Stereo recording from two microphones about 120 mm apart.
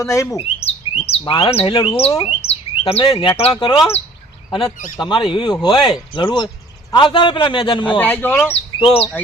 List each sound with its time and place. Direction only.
0.0 s chirp: 25° left (ahead or behind)
0.3 s bird: 55° left (ahead or behind)
1.2 s a man's voice: 45° left (ahead or behind)
3.6 s speech: 35° left (ahead or behind)
5.0 s a man's voice: 45° left (ahead or behind)
7.9 s speech: 15° left (ahead or behind)
8.5 s speech: 55° left (ahead or behind)